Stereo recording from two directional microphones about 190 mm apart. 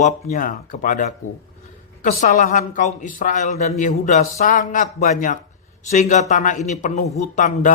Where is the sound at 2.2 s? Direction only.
45° left (ahead or behind).